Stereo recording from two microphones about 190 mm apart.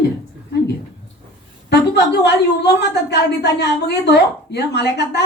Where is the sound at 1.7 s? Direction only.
60° left (ahead or behind).